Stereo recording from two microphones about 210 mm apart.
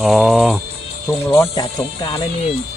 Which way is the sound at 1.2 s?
10° left (ahead or behind).